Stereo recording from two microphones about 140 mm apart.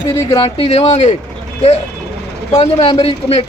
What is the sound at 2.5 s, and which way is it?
Speech, 40° left (ahead or behind).